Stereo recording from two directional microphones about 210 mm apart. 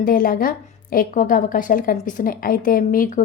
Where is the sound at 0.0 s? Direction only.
40° left (ahead or behind).